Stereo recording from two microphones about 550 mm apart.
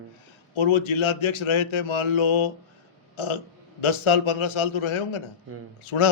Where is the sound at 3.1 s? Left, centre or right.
Left.